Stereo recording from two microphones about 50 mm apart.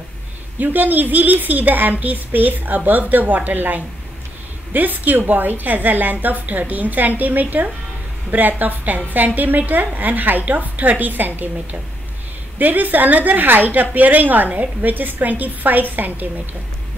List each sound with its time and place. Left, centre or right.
0.6 s a woman's voice: right
12.5 s a woman's voice: right